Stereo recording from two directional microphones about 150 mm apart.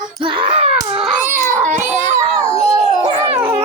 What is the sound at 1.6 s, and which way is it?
Baby cry, 55° right (ahead or behind).